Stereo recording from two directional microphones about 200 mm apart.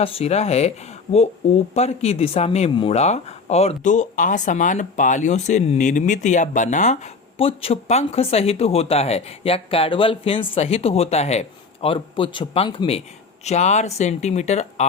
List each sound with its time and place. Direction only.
0.0 s speech: 30° left (ahead or behind)
1.7 s speech: 30° left (ahead or behind)